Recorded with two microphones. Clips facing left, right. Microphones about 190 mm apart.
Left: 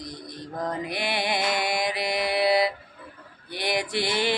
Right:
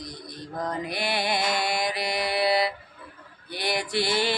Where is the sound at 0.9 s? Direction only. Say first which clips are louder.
Even; 20° left (ahead or behind).